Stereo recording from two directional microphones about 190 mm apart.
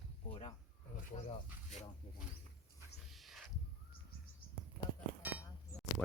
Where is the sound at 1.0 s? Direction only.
35° left (ahead or behind).